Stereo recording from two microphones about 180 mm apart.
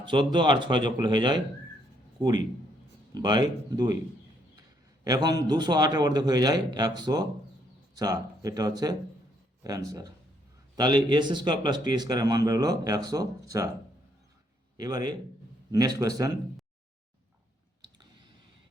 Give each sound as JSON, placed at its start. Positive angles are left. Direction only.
{"t": 0.0, "sound": "a man's voice", "side_deg": -25}
{"t": 3.2, "sound": "a man's voice", "side_deg": -25}
{"t": 5.0, "sound": "a man's voice", "side_deg": -20}
{"t": 14.8, "sound": "a man's voice", "side_deg": -20}